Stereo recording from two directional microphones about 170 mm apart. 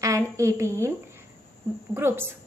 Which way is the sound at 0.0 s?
20° right (ahead or behind).